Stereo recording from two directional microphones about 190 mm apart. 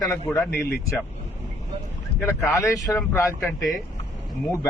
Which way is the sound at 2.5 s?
15° left (ahead or behind).